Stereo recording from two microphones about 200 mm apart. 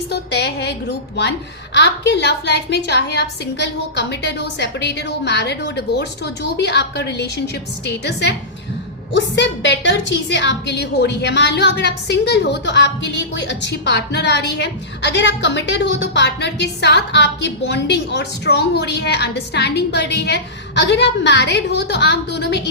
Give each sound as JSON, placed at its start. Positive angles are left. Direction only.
{"t": 0.1, "sound": "a woman's voice", "side_deg": 55}